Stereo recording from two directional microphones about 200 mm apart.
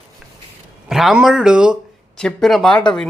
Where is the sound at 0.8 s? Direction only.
Centre (ahead or behind).